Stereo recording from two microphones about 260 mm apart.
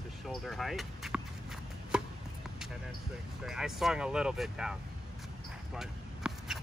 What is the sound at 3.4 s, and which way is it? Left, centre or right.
Speech, centre.